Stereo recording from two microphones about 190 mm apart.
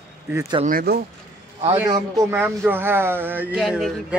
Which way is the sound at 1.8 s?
20° right (ahead or behind).